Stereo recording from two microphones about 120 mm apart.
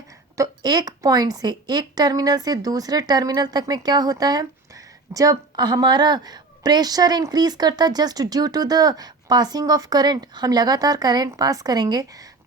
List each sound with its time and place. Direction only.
0.3 s a woman's voice: 30° right (ahead or behind)